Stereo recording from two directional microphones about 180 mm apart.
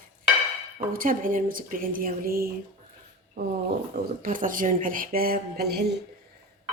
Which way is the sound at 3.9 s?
50° right (ahead or behind).